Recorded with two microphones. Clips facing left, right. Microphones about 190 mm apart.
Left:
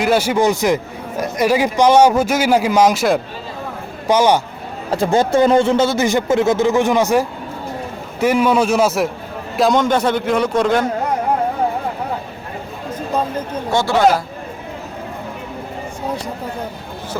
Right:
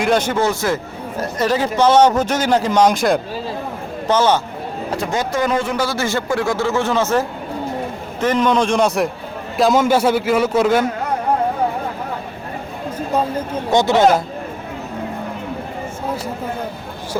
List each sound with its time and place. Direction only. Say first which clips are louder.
0.0 s a man's voice: left 2 dB; 5° left (ahead or behind)
4.9 s a man's voice: left 7 dB; 30° left (ahead or behind); by 10.8 s 5° right (ahead or behind)
13.3 s speech: right 2 dB; 15° right (ahead or behind)